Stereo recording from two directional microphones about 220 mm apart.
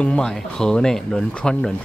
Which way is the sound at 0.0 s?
5° left (ahead or behind).